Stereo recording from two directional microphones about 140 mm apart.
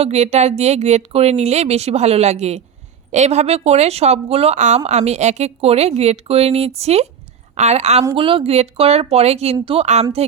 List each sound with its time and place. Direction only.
0.0 s a woman's voice: 50° right (ahead or behind)
8.1 s a woman's voice: 40° right (ahead or behind)